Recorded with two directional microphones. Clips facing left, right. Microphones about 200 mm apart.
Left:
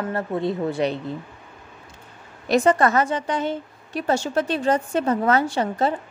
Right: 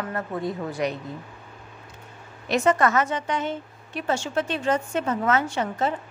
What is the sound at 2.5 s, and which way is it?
A woman's voice, 35° left (ahead or behind).